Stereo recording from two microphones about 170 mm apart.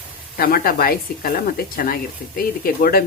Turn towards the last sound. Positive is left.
turn(degrees=60)  # may be behind; listen again after turning